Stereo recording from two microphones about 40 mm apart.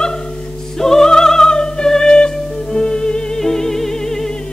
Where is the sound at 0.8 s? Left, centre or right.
Centre.